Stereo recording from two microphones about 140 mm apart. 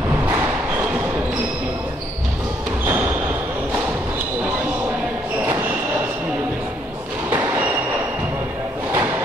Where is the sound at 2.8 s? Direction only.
15° right (ahead or behind).